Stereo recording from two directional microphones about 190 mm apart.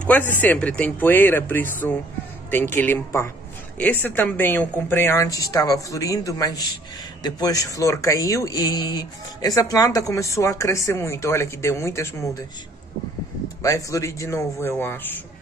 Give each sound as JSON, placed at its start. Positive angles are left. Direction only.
{"t": 0.0, "sound": "speech", "side_deg": 10}
{"t": 13.6, "sound": "speech", "side_deg": 15}